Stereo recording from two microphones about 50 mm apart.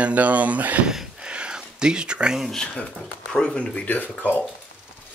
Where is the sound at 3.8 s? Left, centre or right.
Left.